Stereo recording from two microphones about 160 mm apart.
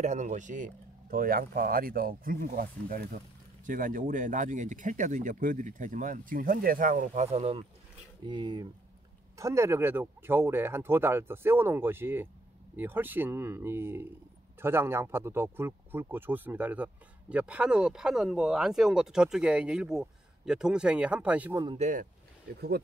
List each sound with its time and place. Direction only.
0.0 s speech: 50° right (ahead or behind)
7.2 s speech: 40° right (ahead or behind)
8.3 s speech: 25° right (ahead or behind); by 21.5 s 10° right (ahead or behind)
21.7 s speech: 45° right (ahead or behind)